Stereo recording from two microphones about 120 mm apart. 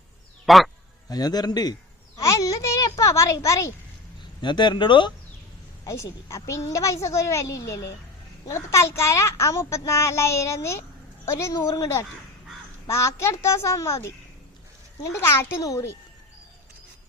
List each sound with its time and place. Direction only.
0.4 s speech: centre (ahead or behind)
1.1 s speech: 35° left (ahead or behind)
2.1 s a sound: 30° left (ahead or behind)
3.0 s a child's voice: 25° left (ahead or behind)
4.4 s speech: 40° left (ahead or behind)
5.8 s a child's voice: 25° left (ahead or behind)
15.1 s a child's voice: 20° left (ahead or behind)